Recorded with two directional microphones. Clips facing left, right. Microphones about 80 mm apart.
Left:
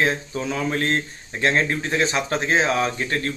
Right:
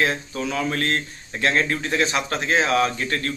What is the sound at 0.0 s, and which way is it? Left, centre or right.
Speech, left.